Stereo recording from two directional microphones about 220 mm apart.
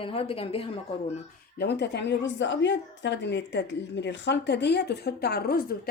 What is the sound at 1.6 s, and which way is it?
A woman's voice, 50° left (ahead or behind).